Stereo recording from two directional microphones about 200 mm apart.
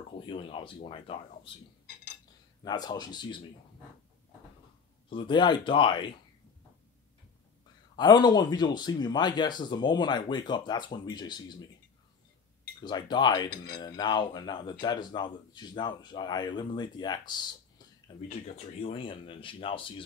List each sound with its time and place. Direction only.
0.3 s speech: 25° left (ahead or behind)
2.6 s speech: 20° left (ahead or behind)
5.1 s speech: 20° left (ahead or behind)
7.9 s speech: 20° left (ahead or behind)
12.8 s speech: 20° left (ahead or behind)